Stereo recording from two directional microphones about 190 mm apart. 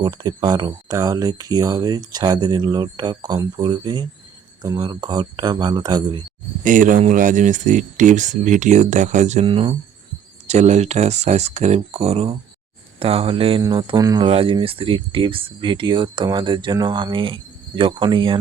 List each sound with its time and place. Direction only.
0.0 s speech: 20° right (ahead or behind)
6.7 s speech: 45° right (ahead or behind); by 18.3 s 25° right (ahead or behind)